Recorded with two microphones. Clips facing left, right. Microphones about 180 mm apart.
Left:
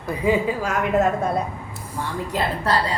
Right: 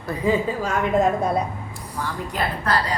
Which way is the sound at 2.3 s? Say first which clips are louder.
Left 3 dB; 25° left (ahead or behind).